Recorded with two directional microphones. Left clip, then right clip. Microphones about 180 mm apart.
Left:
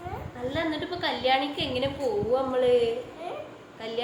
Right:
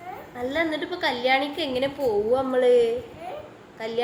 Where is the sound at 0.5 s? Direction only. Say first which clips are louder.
Right 4 dB; 35° right (ahead or behind).